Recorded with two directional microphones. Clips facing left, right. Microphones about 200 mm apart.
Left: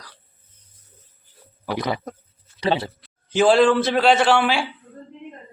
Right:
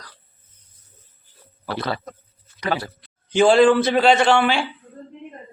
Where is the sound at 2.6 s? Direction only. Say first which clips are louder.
Left 3 dB; 25° left (ahead or behind).